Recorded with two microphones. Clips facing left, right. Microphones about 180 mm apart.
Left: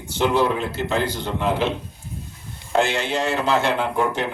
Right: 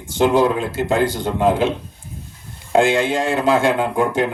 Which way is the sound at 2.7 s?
50° right (ahead or behind).